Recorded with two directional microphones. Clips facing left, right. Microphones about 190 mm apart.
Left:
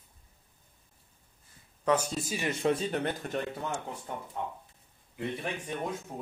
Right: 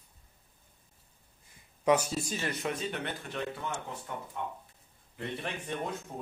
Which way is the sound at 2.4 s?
25° left (ahead or behind).